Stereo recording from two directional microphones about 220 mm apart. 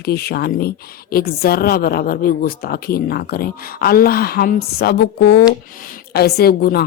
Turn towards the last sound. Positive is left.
turn(degrees=45)  # may be behind; listen again after turning